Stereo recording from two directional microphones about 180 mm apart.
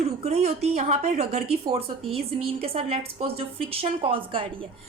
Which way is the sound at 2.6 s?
35° right (ahead or behind).